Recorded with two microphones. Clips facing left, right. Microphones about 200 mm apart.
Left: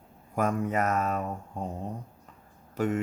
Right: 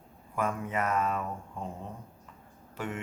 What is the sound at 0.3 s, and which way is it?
Speech, 40° left (ahead or behind).